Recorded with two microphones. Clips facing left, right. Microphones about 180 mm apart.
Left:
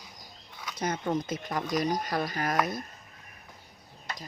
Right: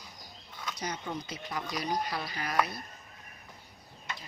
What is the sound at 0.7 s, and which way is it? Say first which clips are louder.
Speech: left 8 dB; 50° left (ahead or behind).